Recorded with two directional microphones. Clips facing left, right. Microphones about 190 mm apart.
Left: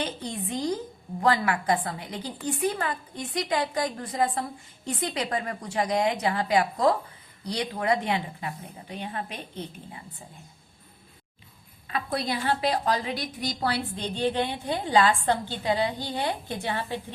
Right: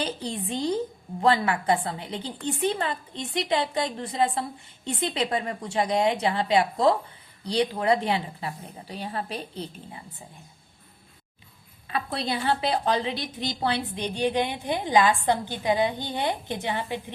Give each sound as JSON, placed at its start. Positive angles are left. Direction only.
{"t": 0.0, "sound": "a woman's voice", "side_deg": -30}
{"t": 11.9, "sound": "a woman's voice", "side_deg": -30}